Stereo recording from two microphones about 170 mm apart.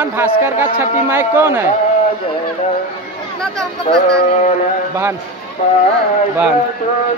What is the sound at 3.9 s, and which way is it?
Speech, 45° left (ahead or behind).